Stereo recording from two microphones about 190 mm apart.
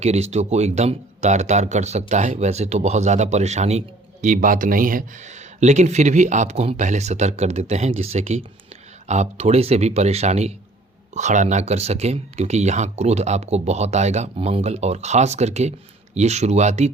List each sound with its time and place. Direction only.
0.0 s speech: 35° right (ahead or behind)